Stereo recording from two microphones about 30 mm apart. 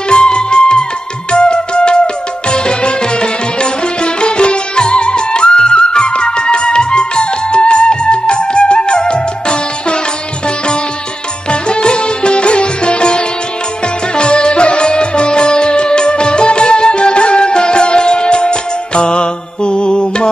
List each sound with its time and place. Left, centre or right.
0.1 s music: left
11.6 s music: left